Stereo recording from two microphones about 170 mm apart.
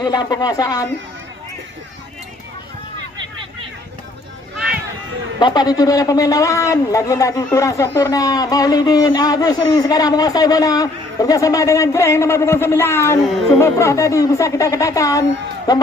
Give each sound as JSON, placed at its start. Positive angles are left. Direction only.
{"t": 0.0, "sound": "speech", "side_deg": 25}
{"t": 5.4, "sound": "a woman's voice", "side_deg": 25}